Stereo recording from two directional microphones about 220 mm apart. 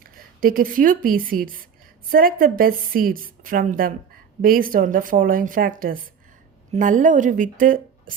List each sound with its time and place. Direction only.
0.3 s a woman's voice: 40° right (ahead or behind)